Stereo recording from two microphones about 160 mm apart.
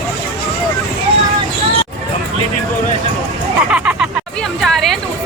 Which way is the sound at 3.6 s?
10° right (ahead or behind).